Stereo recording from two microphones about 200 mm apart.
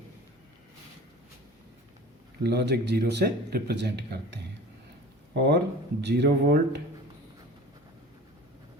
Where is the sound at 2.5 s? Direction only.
55° right (ahead or behind).